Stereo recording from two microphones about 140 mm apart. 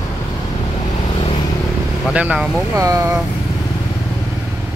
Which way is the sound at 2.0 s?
10° right (ahead or behind).